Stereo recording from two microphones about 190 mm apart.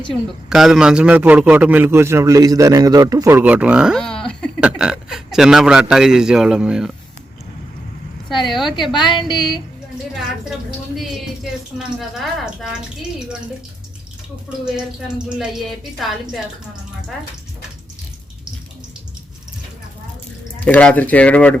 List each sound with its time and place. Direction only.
0.1 s a man's voice: centre (ahead or behind)
8.3 s a man's voice: centre (ahead or behind)
9.0 s a woman's voice: 25° left (ahead or behind)
11.8 s a man's voice: centre (ahead or behind)
14.6 s a man's voice: 5° right (ahead or behind)
20.7 s speech: 10° left (ahead or behind)